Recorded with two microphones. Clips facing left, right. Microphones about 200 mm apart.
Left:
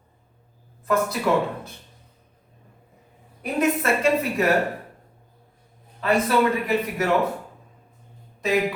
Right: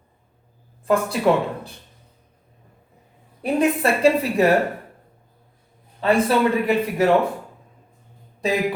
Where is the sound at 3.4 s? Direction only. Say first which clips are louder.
Right 3 dB; 30° right (ahead or behind).